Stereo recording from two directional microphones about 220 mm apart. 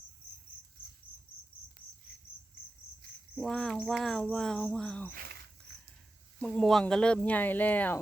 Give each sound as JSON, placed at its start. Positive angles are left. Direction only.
{"t": 3.3, "sound": "cricket", "side_deg": 0}
{"t": 5.1, "sound": "cricket", "side_deg": -45}
{"t": 6.4, "sound": "speech", "side_deg": 5}